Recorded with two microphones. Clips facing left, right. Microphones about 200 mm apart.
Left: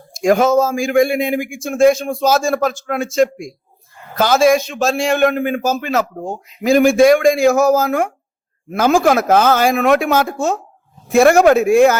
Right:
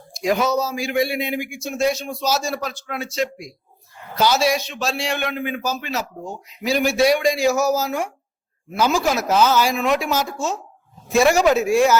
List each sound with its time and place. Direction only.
0.1 s a man's voice: 50° left (ahead or behind)